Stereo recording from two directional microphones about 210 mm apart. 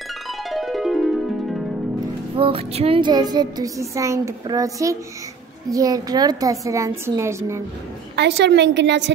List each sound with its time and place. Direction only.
0.5 s music: centre (ahead or behind)
2.3 s a sound: 25° right (ahead or behind)
5.7 s a woman's voice: 15° right (ahead or behind)
8.2 s a woman's voice: 55° right (ahead or behind)